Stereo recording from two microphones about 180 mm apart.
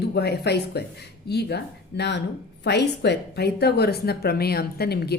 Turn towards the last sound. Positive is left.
turn(degrees=60)  # may be behind; listen again after turning